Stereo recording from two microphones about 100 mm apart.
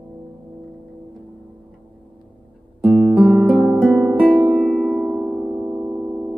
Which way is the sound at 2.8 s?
15° right (ahead or behind).